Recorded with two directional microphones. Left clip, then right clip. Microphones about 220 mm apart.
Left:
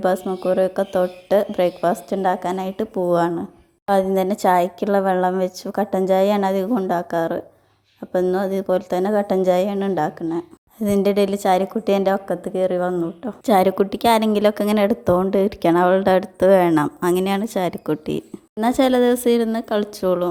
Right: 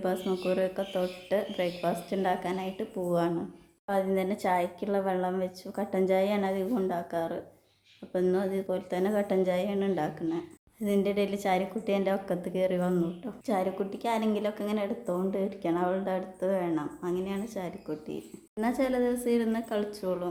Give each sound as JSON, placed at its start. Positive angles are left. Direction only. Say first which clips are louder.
{"t": 0.3, "sound": "a woman's voice", "louder": "left 10 dB", "side_deg": 25}
{"t": 13.4, "sound": "a woman's voice", "louder": "left 14 dB", "side_deg": 40}